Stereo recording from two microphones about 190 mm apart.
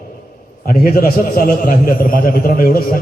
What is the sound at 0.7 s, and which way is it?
A man's voice, 50° left (ahead or behind).